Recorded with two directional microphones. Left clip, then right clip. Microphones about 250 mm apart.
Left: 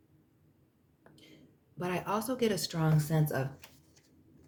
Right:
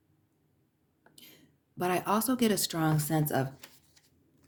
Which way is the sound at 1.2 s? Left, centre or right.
Right.